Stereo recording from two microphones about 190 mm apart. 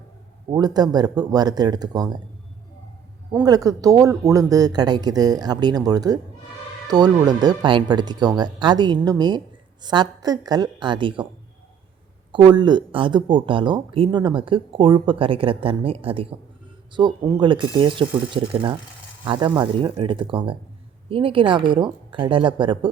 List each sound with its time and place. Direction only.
0.5 s speech: 20° right (ahead or behind)
3.4 s speech: 20° right (ahead or behind)
12.3 s speech: 25° right (ahead or behind)